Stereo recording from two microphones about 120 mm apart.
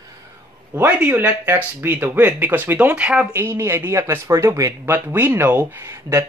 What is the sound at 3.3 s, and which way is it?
Speech, 20° right (ahead or behind).